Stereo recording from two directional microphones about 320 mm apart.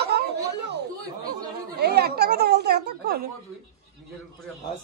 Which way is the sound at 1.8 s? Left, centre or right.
Right.